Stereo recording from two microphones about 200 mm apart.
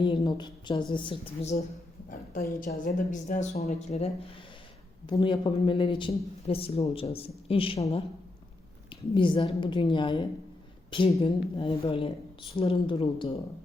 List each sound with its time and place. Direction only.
0.0 s a man's voice: 25° left (ahead or behind)
8.9 s a man's voice: 25° left (ahead or behind)